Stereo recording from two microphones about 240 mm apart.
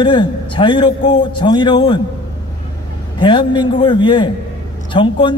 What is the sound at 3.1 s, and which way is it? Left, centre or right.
A man's voice, centre.